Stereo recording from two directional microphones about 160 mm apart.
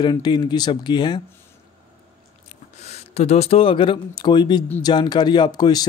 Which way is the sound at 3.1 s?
40° left (ahead or behind).